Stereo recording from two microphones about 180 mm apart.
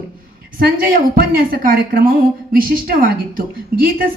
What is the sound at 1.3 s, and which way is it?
A woman's voice, 55° right (ahead or behind).